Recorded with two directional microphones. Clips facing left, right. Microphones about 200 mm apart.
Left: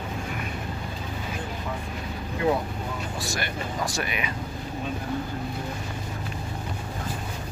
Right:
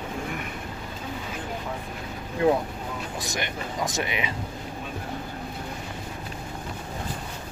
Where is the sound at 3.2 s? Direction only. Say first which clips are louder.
Even; 20° right (ahead or behind).